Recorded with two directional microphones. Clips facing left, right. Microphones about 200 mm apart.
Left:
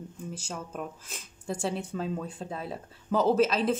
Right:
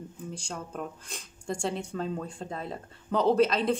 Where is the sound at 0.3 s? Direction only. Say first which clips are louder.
Even; 5° left (ahead or behind).